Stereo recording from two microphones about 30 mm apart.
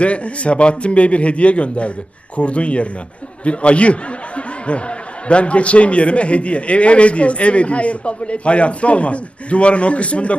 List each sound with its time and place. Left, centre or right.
0.0 s a man's voice: left